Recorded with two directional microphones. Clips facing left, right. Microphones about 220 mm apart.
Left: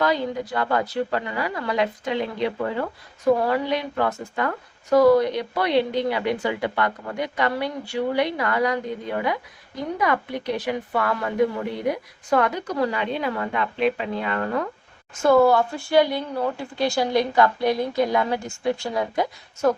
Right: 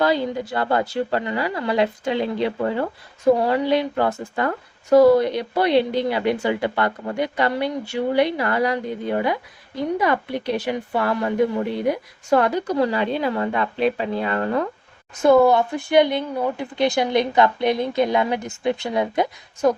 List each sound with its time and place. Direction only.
0.0 s speech: 30° right (ahead or behind)
12.3 s a woman's voice: 30° right (ahead or behind)
15.2 s speech: 20° right (ahead or behind)